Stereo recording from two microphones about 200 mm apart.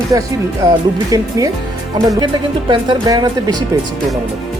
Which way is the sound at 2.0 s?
20° right (ahead or behind).